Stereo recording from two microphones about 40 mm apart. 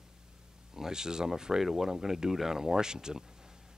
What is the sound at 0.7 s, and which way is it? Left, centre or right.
Speech, centre.